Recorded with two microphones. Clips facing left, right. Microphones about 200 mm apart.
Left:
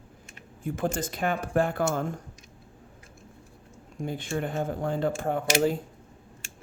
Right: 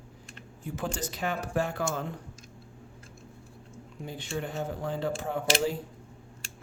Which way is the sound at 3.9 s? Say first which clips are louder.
Left 5 dB; 50° left (ahead or behind).